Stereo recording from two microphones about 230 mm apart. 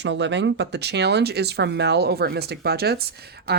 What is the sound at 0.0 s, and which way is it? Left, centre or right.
Speech, right.